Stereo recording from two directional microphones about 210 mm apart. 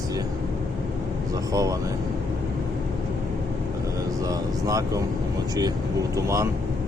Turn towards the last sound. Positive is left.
turn(degrees=-15)  # may be behind; listen again after turning